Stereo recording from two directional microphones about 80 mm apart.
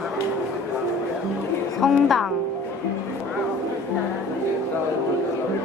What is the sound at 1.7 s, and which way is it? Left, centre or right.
Speech, centre.